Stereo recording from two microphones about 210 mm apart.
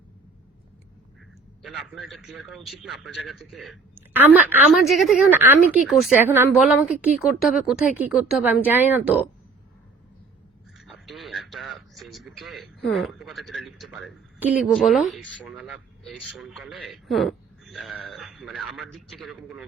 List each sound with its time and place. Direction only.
1.6 s a man's voice: centre (ahead or behind)
10.8 s a man's voice: centre (ahead or behind)